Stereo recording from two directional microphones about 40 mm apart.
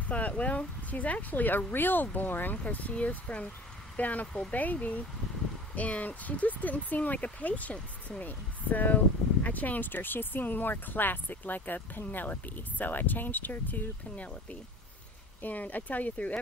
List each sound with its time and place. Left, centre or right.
0.0 s speech: left
3.1 s speech: left
14.1 s speech: left
15.4 s speech: left